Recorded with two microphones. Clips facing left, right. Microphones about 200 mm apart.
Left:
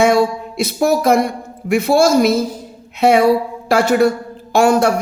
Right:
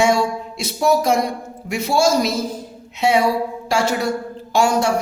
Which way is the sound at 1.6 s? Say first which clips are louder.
Left 5 dB; 55° left (ahead or behind).